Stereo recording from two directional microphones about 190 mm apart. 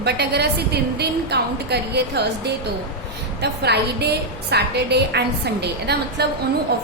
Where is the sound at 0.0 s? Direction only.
60° right (ahead or behind).